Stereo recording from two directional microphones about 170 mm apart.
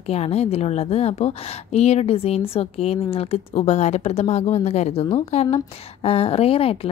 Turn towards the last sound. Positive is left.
turn(degrees=35)  # may be behind; listen again after turning